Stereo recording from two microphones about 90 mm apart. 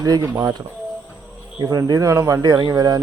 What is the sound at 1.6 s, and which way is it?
Speech, 45° right (ahead or behind).